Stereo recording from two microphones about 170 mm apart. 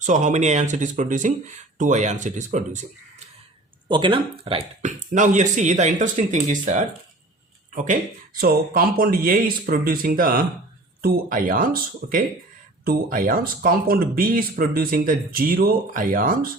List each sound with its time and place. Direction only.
0.0 s speech: 45° right (ahead or behind)
3.8 s speech: 30° right (ahead or behind)
4.9 s speech: 45° right (ahead or behind)